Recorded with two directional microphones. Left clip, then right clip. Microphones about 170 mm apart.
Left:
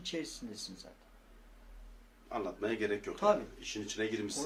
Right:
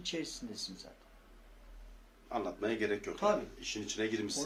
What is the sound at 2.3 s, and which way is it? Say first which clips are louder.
Speech: right 1 dB; 5° right (ahead or behind).